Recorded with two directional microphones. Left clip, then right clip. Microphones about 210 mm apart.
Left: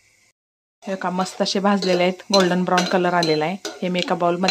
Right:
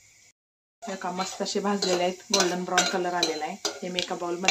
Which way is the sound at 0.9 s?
45° left (ahead or behind).